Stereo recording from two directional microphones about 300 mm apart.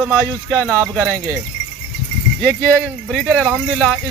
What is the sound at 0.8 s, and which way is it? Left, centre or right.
Speech, centre.